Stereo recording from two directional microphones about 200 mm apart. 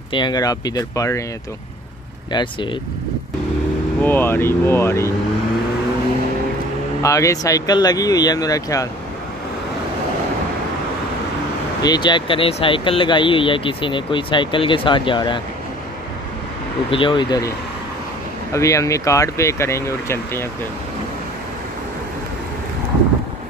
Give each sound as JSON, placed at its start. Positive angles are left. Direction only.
{"t": 0.1, "sound": "speech", "side_deg": 20}
{"t": 2.3, "sound": "speech", "side_deg": 25}
{"t": 4.0, "sound": "speech", "side_deg": 10}
{"t": 7.0, "sound": "speech", "side_deg": 15}
{"t": 11.8, "sound": "speech", "side_deg": 20}
{"t": 16.9, "sound": "speech", "side_deg": 25}
{"t": 18.5, "sound": "speech", "side_deg": 15}